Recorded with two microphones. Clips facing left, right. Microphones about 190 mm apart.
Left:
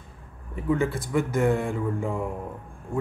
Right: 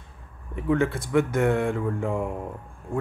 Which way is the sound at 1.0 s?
60° right (ahead or behind).